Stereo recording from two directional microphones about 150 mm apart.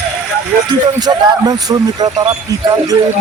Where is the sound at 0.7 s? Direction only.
30° right (ahead or behind).